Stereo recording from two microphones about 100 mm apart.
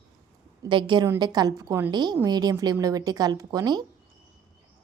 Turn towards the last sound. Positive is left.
turn(degrees=-40)  # may be behind; listen again after turning